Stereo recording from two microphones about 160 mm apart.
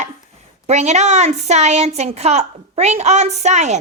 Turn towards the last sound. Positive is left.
turn(degrees=-45)  # may be behind; listen again after turning